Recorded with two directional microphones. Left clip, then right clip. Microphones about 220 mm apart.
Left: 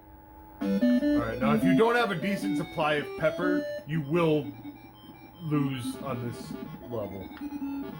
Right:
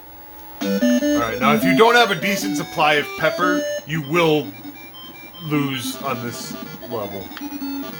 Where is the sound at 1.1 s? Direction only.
20° right (ahead or behind).